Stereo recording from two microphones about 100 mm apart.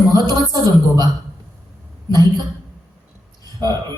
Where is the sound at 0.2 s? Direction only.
45° right (ahead or behind).